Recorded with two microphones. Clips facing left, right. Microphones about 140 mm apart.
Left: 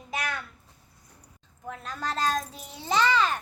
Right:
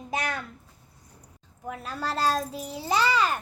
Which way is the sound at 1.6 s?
10° right (ahead or behind).